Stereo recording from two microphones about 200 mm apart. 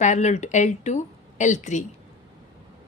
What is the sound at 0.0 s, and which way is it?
A woman's voice, 35° left (ahead or behind).